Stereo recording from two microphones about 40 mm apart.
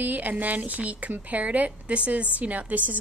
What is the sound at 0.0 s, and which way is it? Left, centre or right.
A woman's voice, right.